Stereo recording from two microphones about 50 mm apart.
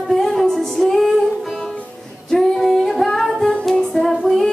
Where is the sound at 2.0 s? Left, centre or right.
Centre.